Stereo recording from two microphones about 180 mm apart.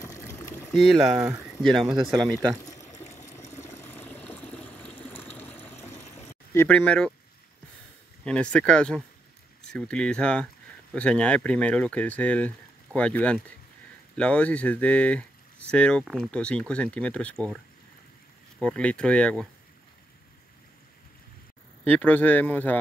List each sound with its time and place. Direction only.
0.0 s a sound: 15° left (ahead or behind)
1.1 s speech: 15° right (ahead or behind)
1.4 s speech: centre (ahead or behind)
3.2 s water: 15° left (ahead or behind)
6.5 s speech: 10° left (ahead or behind)
8.3 s speech: 5° left (ahead or behind)
18.6 s speech: 5° left (ahead or behind)
21.8 s speech: 10° left (ahead or behind)